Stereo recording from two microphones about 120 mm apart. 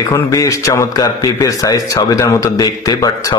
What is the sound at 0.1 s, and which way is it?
A man's voice, 30° left (ahead or behind).